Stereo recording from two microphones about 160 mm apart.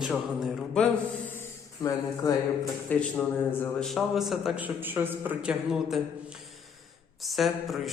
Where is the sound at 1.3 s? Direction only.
15° left (ahead or behind).